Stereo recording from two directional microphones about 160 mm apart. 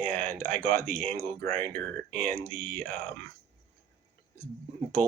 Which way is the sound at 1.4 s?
15° left (ahead or behind).